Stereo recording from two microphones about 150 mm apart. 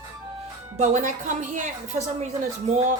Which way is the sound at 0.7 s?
50° right (ahead or behind).